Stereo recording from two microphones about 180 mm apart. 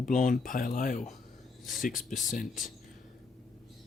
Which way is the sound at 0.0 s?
45° left (ahead or behind).